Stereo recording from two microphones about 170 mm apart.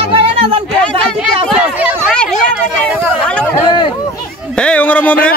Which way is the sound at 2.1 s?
5° left (ahead or behind).